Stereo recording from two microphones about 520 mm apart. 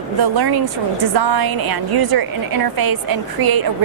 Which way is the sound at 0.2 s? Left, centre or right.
Right.